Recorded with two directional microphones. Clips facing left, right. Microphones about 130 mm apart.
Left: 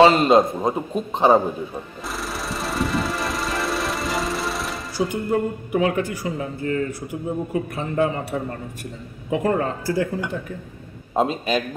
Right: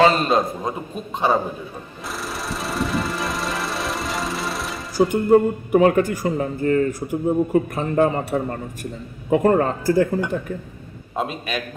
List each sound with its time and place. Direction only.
0.0 s a man's voice: 20° left (ahead or behind)
2.2 s jackhammer: centre (ahead or behind)
4.9 s speech: 45° right (ahead or behind)
11.1 s a man's voice: 30° left (ahead or behind)